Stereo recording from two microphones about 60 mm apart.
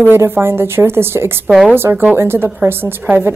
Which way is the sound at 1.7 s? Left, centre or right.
Right.